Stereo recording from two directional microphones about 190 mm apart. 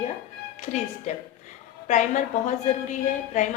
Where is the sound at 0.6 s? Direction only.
40° left (ahead or behind).